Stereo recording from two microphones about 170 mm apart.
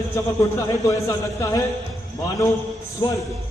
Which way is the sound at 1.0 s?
15° left (ahead or behind).